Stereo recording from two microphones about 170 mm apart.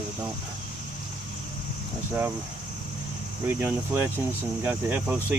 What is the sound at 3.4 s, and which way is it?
Speech, 15° right (ahead or behind).